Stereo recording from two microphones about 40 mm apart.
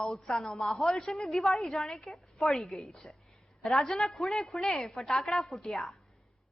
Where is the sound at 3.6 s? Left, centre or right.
Centre.